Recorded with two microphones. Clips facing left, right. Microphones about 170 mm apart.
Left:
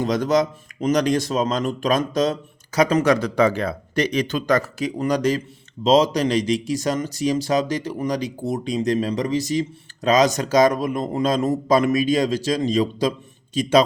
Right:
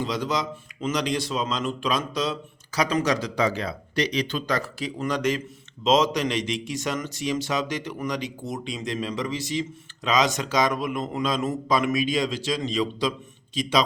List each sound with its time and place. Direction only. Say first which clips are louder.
0.0 s a man's voice: left 8 dB; 45° left (ahead or behind)